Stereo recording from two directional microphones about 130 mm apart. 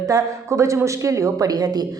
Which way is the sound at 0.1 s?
25° right (ahead or behind).